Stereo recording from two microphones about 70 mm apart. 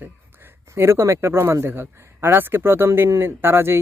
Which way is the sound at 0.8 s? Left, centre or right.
Right.